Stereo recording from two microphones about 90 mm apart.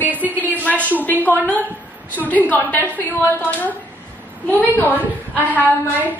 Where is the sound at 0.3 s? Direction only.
20° right (ahead or behind).